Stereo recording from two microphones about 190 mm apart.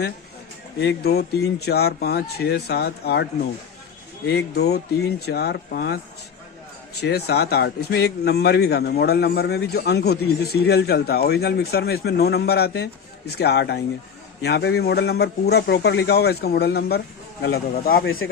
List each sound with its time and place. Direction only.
0.8 s speech: 60° left (ahead or behind)
4.3 s speech: 60° left (ahead or behind)
7.0 s speech: 60° left (ahead or behind)